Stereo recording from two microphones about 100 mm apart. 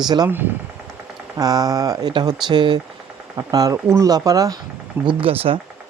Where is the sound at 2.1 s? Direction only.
50° right (ahead or behind).